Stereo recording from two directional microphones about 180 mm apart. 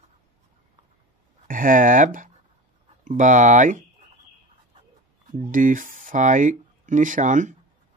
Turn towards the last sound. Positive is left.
turn(degrees=-45)  # may be behind; listen again after turning